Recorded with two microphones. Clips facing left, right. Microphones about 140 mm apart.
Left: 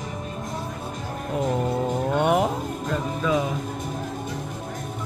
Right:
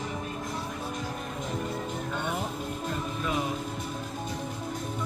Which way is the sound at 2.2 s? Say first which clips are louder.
Left 13 dB; 80° left.